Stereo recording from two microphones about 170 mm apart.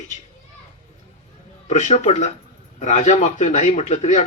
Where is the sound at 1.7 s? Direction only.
45° left (ahead or behind).